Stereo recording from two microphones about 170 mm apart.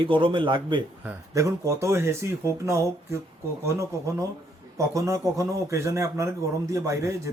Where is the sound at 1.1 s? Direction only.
20° right (ahead or behind).